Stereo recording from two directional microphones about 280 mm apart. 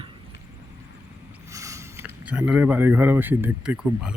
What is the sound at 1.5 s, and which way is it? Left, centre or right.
Speech, centre.